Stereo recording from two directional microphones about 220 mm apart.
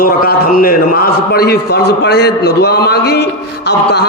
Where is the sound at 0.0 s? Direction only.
40° left (ahead or behind).